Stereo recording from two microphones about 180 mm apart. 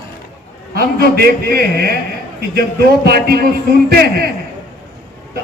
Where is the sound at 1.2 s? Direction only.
60° right (ahead or behind).